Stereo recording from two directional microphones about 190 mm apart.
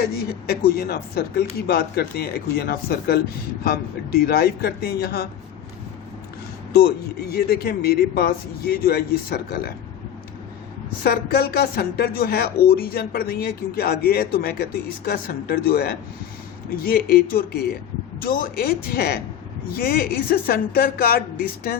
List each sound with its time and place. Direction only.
0.0 s speech: 55° left (ahead or behind)
6.7 s a woman's voice: 55° left (ahead or behind)
11.0 s a woman's voice: 55° left (ahead or behind)